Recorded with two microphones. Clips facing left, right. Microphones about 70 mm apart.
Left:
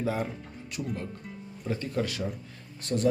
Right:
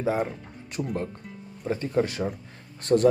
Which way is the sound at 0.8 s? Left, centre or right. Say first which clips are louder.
Right 5 dB; right.